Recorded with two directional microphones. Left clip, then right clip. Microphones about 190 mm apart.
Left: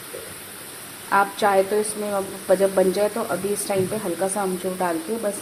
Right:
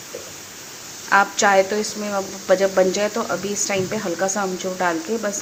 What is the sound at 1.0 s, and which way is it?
Speech, centre (ahead or behind).